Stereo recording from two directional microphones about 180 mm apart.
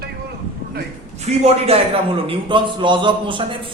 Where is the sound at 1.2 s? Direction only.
35° right (ahead or behind).